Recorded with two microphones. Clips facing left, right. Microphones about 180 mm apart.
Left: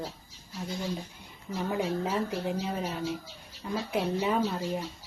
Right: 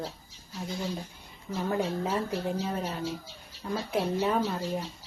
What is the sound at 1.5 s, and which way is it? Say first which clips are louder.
Speech: right 1 dB; 5° left (ahead or behind).